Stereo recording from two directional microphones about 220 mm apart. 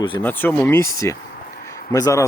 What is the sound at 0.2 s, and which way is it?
Speech, 10° left (ahead or behind).